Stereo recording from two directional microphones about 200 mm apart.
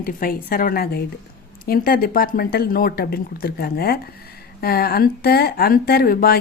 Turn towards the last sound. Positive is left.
turn(degrees=50)  # may be behind; listen again after turning